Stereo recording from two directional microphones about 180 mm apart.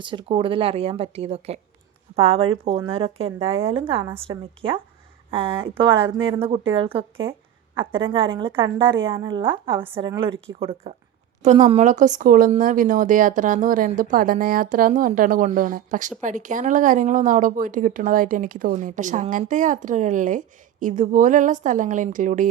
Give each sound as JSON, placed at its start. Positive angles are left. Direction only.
{"t": 0.0, "sound": "a woman's voice", "side_deg": -25}